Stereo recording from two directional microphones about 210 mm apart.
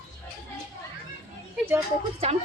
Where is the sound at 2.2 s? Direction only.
30° right (ahead or behind).